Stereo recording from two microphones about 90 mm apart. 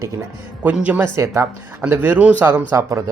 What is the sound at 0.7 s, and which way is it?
Speech, 15° right (ahead or behind).